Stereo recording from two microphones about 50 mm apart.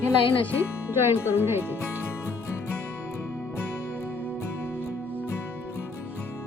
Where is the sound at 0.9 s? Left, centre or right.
Right.